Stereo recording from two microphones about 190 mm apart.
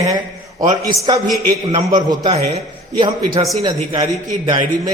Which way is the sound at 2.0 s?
30° right (ahead or behind).